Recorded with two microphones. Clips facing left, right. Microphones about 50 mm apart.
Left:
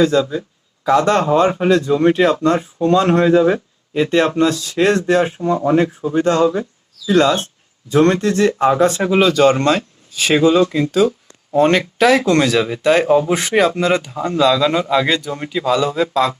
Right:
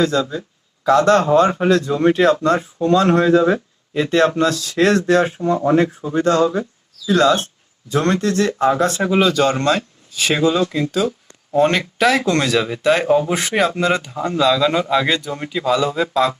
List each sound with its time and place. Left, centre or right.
0.0 s speech: centre
2.8 s speech: left
6.1 s speech: centre